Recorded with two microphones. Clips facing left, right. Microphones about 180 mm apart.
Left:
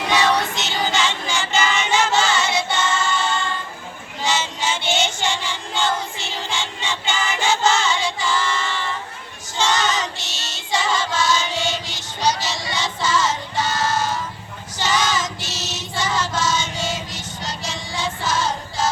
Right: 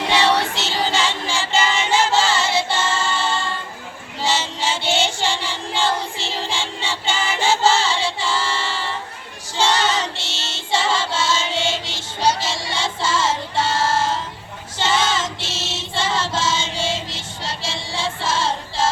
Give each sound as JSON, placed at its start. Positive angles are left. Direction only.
{"t": 0.1, "sound": "child singing", "side_deg": -30}